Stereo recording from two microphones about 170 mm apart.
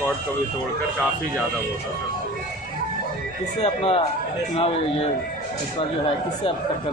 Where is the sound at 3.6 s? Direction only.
35° left (ahead or behind).